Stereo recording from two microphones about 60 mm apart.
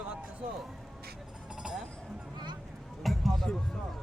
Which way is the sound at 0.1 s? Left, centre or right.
Right.